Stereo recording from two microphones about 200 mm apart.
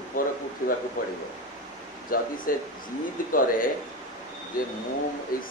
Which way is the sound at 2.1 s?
45° left (ahead or behind).